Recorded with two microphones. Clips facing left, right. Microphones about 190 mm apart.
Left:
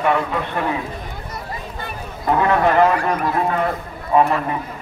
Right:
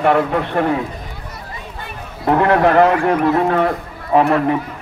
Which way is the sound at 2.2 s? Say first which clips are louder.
Right 3 dB; 65° right (ahead or behind).